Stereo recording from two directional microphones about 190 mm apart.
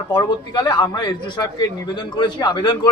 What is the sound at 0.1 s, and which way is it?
A man's voice, 20° left (ahead or behind).